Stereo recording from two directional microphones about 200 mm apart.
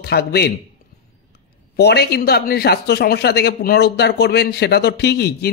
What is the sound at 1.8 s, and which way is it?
A man's voice, 55° left (ahead or behind).